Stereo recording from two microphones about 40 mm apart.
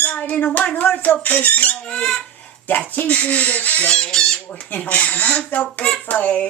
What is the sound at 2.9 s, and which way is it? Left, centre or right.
Speech, left.